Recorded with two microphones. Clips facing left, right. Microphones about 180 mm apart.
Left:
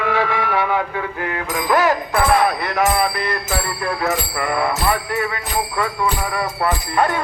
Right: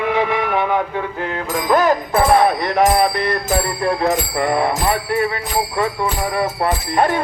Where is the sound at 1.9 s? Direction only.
25° right (ahead or behind).